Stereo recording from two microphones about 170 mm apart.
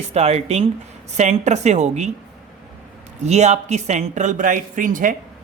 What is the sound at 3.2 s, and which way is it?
Speech, 40° right (ahead or behind).